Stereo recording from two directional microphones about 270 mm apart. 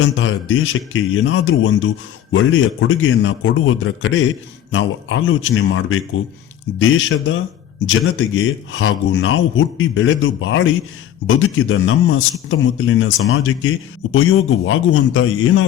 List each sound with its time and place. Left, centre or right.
0.0 s speech: left